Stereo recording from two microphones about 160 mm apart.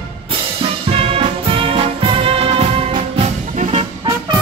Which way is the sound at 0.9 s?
35° right (ahead or behind).